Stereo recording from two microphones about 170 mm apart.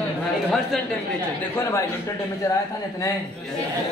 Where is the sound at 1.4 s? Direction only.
15° left (ahead or behind).